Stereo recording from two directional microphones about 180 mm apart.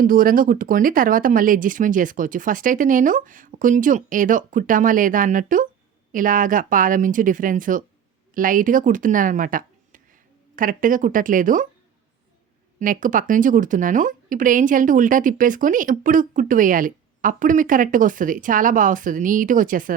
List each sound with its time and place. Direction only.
0.0 s speech: 50° right (ahead or behind)
12.8 s speech: 50° right (ahead or behind)